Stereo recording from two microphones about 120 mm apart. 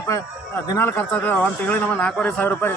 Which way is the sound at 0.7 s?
20° left (ahead or behind).